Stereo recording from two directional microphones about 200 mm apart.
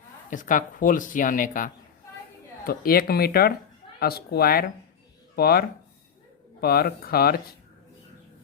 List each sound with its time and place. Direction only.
0.3 s speech: 40° left (ahead or behind)